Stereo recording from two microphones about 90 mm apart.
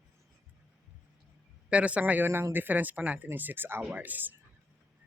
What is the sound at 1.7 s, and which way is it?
Speech, 15° right (ahead or behind).